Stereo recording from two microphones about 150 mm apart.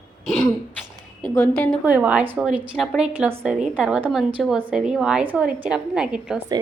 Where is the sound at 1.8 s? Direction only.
10° right (ahead or behind).